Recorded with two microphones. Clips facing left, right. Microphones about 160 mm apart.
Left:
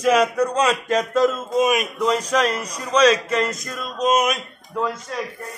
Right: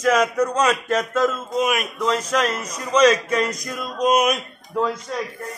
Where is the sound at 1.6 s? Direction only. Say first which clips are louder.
Left 3 dB; 15° left (ahead or behind).